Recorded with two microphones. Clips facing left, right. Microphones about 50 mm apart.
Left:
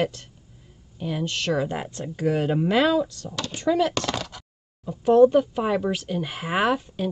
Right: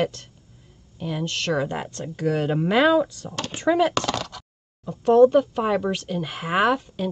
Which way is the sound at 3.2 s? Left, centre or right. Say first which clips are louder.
Right 1 dB; right.